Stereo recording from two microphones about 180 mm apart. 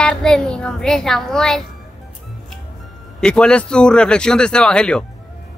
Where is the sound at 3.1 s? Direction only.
5° left (ahead or behind).